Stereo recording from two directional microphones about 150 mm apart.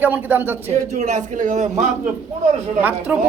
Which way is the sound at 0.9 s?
55° right (ahead or behind).